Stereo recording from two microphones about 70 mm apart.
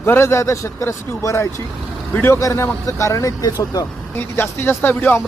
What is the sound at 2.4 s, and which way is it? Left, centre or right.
Speech, left.